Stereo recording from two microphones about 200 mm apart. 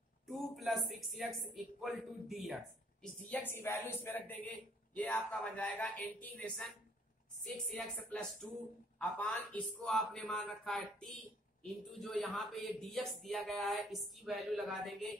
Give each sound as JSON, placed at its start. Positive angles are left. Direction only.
{"t": 0.3, "sound": "speech", "side_deg": 0}
{"t": 7.7, "sound": "speech", "side_deg": 5}